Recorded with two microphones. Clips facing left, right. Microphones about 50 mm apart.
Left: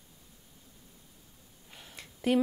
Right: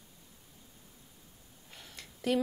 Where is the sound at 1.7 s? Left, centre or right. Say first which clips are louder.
Left 1 dB; centre.